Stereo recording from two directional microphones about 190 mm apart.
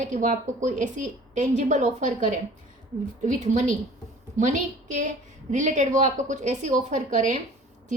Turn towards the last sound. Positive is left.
turn(degrees=-40)  # may be behind; listen again after turning